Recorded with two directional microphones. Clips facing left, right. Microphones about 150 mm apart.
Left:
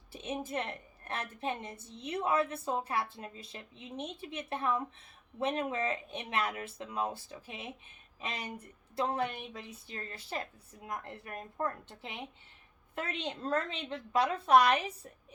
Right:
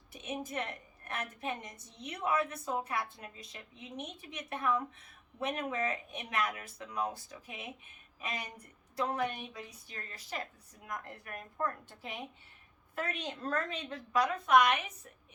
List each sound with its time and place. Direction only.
0.1 s a woman's voice: 30° left (ahead or behind)